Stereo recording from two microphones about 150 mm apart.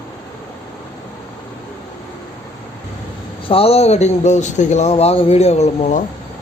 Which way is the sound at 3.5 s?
40° left (ahead or behind).